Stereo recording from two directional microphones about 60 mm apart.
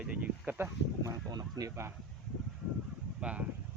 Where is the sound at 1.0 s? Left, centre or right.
Right.